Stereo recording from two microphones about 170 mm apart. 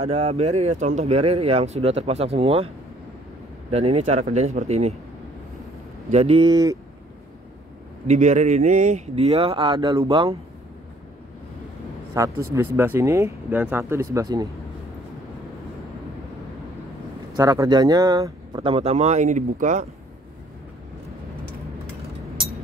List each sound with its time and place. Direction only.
0.0 s speech: 40° right (ahead or behind)
3.7 s speech: 35° right (ahead or behind)
6.0 s speech: 35° right (ahead or behind); by 6.8 s 20° right (ahead or behind)
8.1 s speech: 40° right (ahead or behind)
12.2 s speech: 20° right (ahead or behind)
17.4 s speech: 20° right (ahead or behind); by 19.9 s 45° right (ahead or behind)